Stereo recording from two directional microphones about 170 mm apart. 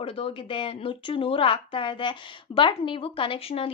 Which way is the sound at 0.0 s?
30° left (ahead or behind).